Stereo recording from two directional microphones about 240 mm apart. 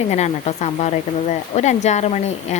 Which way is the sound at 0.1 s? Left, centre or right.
Left.